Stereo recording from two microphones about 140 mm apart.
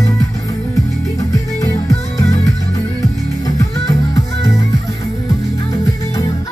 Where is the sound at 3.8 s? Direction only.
25° left (ahead or behind).